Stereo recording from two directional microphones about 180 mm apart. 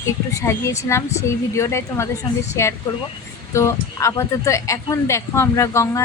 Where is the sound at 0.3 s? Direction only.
15° left (ahead or behind).